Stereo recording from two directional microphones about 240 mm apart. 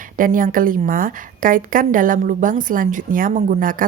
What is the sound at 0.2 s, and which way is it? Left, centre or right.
A woman's voice, right.